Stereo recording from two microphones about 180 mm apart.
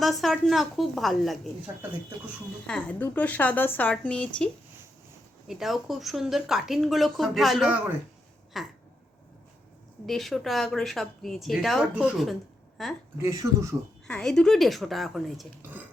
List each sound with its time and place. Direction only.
0.0 s speech: centre (ahead or behind)
1.7 s speech: 15° right (ahead or behind)
2.6 s speech: 5° left (ahead or behind)
5.5 s speech: centre (ahead or behind)
10.1 s speech: centre (ahead or behind)
13.2 s speech: 15° right (ahead or behind)
14.1 s speech: 5° left (ahead or behind)